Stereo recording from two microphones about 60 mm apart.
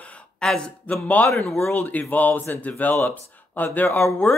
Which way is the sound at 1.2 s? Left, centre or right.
Left.